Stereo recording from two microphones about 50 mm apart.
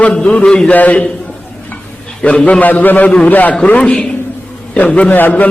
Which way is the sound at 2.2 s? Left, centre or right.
Left.